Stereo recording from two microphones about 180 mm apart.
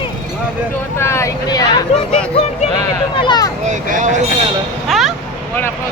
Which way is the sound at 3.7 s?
45° right (ahead or behind).